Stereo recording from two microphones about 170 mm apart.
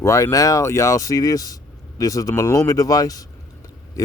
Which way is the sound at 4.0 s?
20° left (ahead or behind).